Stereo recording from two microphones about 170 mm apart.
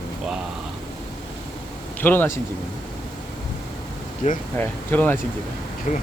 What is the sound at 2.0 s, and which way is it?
Speech, 10° left (ahead or behind).